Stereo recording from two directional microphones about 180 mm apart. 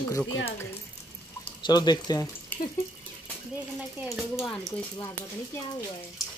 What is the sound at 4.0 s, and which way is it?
Speech, 10° right (ahead or behind).